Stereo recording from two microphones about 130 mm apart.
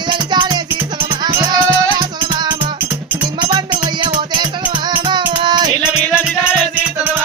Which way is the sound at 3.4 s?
35° right (ahead or behind).